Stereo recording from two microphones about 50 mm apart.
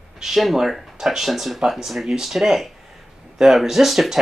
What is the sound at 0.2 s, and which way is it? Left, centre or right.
Speech, centre.